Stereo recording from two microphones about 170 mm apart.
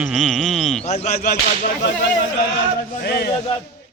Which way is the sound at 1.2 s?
65° left (ahead or behind).